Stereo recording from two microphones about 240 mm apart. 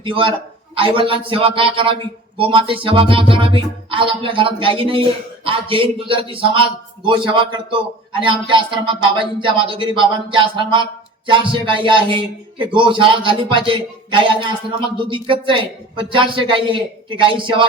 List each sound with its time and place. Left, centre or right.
0.0 s a man's voice: right